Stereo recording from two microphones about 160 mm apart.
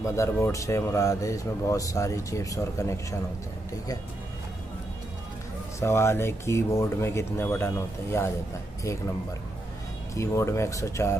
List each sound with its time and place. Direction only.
0.0 s speech: 20° left (ahead or behind)
5.8 s speech: 15° left (ahead or behind)
10.1 s speech: 15° left (ahead or behind)